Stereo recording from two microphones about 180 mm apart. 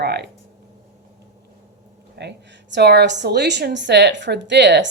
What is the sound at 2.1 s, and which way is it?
A woman's voice, 75° right (ahead or behind).